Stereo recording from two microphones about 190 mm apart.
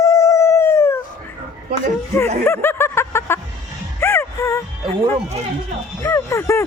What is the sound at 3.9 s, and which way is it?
Music, 10° left (ahead or behind).